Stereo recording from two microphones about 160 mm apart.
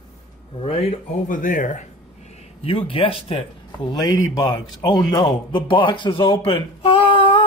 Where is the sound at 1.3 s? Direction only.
55° left (ahead or behind).